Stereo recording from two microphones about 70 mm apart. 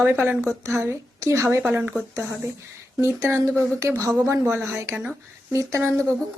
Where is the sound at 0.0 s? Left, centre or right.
Right.